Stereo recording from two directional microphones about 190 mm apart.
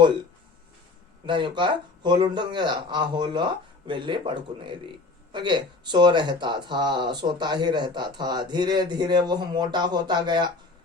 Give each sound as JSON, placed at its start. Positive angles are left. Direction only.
{"t": 1.3, "sound": "speech", "side_deg": -25}